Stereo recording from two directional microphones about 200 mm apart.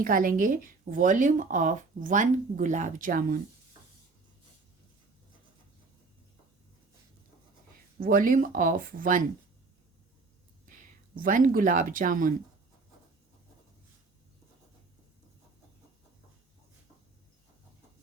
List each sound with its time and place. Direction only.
0.0 s speech: 45° right (ahead or behind)
7.9 s speech: 45° right (ahead or behind)
10.7 s speech: 45° right (ahead or behind)